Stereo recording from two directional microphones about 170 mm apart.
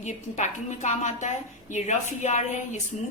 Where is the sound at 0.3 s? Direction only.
45° left (ahead or behind).